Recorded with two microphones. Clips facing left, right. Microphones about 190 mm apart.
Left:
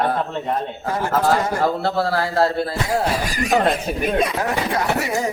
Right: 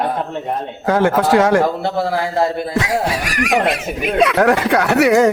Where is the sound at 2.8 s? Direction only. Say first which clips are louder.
Right 1 dB; 85° right.